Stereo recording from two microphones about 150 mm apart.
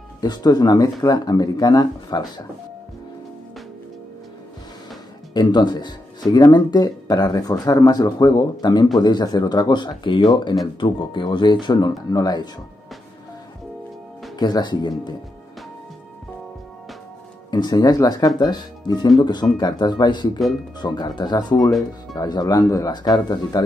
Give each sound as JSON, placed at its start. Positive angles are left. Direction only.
{"t": 0.2, "sound": "speech", "side_deg": 25}
{"t": 5.3, "sound": "speech", "side_deg": 30}
{"t": 14.4, "sound": "speech", "side_deg": 30}
{"t": 17.5, "sound": "speech", "side_deg": 25}
{"t": 21.5, "sound": "speech", "side_deg": 0}
{"t": 22.1, "sound": "speech", "side_deg": 25}